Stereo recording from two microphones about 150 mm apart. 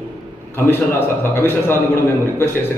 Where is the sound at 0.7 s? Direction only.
15° left (ahead or behind).